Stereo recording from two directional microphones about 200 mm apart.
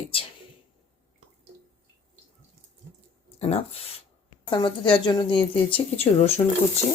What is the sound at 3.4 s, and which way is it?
Speech, 30° left (ahead or behind).